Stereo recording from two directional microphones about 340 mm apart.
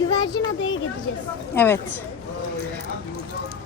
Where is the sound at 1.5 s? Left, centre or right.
Centre.